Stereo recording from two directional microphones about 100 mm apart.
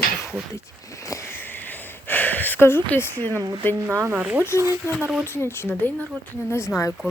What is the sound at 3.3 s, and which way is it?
Speech, 35° right (ahead or behind).